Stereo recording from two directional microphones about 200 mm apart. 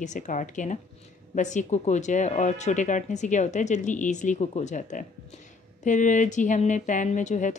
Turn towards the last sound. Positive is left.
turn(degrees=40)  # may be behind; listen again after turning